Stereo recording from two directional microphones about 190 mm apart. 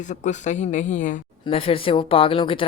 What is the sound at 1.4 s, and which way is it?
Speech, 30° left (ahead or behind).